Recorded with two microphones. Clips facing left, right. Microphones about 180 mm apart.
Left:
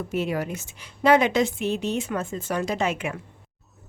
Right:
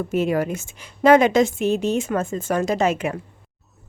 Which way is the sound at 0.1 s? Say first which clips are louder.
Right 6 dB; 50° right (ahead or behind).